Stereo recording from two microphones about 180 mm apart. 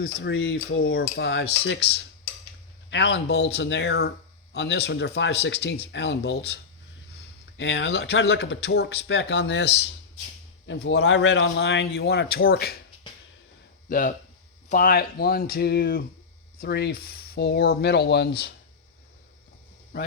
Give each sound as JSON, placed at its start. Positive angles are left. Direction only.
{"t": 0.0, "sound": "cutlery", "side_deg": 80}
{"t": 2.9, "sound": "speech", "side_deg": 75}
{"t": 7.5, "sound": "speech", "side_deg": 80}
{"t": 10.7, "sound": "speech", "side_deg": 80}
{"t": 13.9, "sound": "speech", "side_deg": 50}